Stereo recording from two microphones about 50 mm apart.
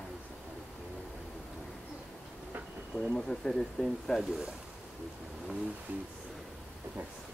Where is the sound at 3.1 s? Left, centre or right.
Centre.